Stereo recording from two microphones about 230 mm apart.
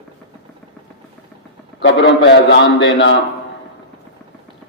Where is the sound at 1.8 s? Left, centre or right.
Left.